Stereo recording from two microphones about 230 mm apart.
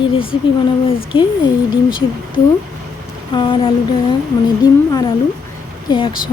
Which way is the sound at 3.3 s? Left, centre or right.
Left.